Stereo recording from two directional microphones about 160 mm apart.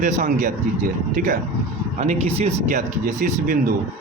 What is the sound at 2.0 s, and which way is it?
Speech, 45° right (ahead or behind).